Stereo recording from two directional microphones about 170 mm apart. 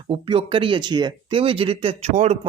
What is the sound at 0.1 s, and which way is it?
Speech, 30° right (ahead or behind).